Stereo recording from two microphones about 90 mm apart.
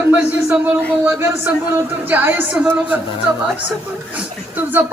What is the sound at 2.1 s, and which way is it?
Speech, 20° right (ahead or behind).